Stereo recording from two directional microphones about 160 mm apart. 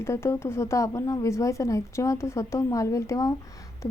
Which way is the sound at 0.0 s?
15° left (ahead or behind).